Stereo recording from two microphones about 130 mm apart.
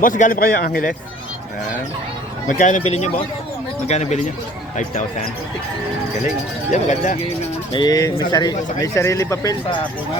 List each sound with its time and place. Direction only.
0.0 s a man's voice: 90° left
2.5 s speech: 80° left; by 4.2 s 60° left (ahead or behind)
6.7 s speech: 70° left (ahead or behind)
7.7 s speech: 35° left (ahead or behind)